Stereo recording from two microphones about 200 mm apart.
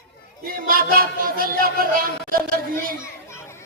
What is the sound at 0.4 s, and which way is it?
Speech, 45° right (ahead or behind).